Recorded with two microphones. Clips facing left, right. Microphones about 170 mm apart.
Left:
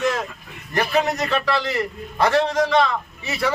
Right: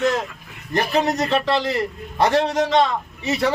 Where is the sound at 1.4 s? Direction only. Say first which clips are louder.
Right 2 dB; 20° right (ahead or behind).